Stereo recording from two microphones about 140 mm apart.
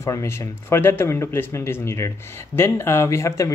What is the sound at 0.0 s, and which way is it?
Speech, 20° left (ahead or behind).